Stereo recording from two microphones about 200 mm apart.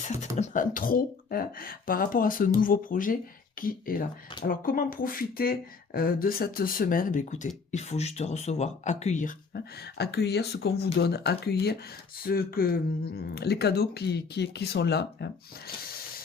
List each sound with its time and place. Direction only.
0.0 s speech: 35° left (ahead or behind)
9.6 s speech: 55° left (ahead or behind)